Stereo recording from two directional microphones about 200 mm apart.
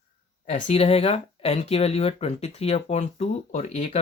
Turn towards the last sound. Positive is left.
turn(degrees=35)  # may be behind; listen again after turning